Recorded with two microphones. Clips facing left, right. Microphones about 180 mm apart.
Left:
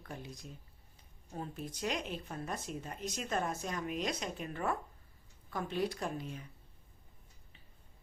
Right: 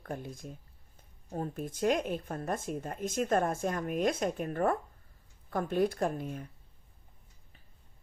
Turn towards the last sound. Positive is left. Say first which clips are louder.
# right 7 dB
turn(degrees=-50)  # may be behind; listen again after turning